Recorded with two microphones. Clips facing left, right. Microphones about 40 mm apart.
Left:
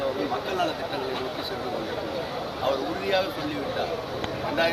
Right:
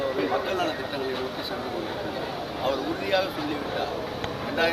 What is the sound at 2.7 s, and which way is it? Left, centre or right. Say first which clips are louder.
Speech: even; centre.